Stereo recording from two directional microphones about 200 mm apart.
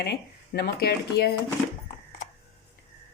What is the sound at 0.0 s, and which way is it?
Speech, 55° left (ahead or behind).